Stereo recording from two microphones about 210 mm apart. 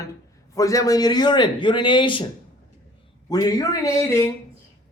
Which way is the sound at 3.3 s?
15° left (ahead or behind).